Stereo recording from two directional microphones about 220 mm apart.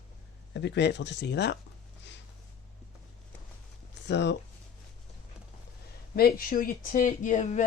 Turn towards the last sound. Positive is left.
turn(degrees=35)  # may be behind; listen again after turning